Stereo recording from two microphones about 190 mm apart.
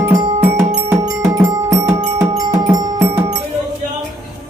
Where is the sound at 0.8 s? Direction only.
15° right (ahead or behind).